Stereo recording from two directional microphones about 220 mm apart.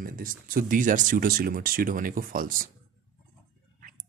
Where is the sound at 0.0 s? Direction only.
40° right (ahead or behind).